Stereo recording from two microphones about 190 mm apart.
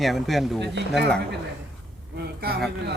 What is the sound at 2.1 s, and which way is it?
Speech, 55° right (ahead or behind).